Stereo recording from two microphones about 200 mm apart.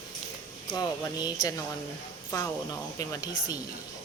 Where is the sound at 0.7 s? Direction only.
20° left (ahead or behind).